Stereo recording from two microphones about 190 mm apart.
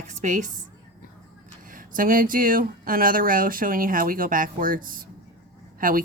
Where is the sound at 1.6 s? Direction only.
45° right (ahead or behind).